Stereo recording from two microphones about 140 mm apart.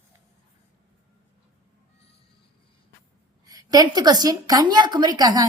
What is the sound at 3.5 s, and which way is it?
A woman's voice, 25° right (ahead or behind).